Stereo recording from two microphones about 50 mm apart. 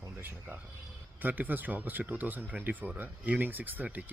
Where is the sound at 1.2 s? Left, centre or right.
Right.